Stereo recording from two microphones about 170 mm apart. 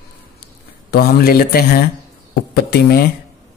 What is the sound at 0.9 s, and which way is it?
Speech, 65° left (ahead or behind).